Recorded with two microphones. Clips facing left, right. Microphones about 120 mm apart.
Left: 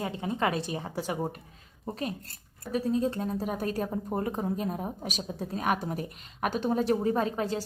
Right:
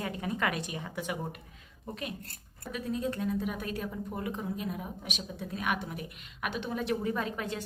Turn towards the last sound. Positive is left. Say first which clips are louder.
# left 6 dB
turn(degrees=30)  # may be behind; listen again after turning